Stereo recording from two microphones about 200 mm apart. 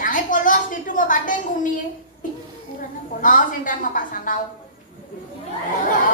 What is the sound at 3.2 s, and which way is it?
A woman's voice, 40° left (ahead or behind).